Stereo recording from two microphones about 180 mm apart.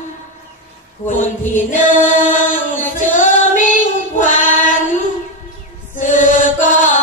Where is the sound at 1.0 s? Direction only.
45° left (ahead or behind).